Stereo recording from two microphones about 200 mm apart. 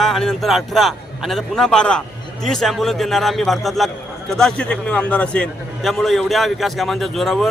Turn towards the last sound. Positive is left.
turn(degrees=0)  # may be behind; listen again after turning